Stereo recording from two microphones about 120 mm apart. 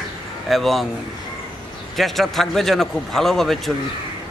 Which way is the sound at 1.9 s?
Centre (ahead or behind).